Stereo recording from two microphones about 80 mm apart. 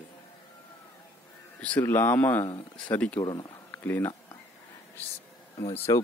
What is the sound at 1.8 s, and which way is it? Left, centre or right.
Speech, left.